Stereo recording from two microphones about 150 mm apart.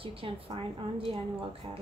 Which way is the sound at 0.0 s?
40° right (ahead or behind).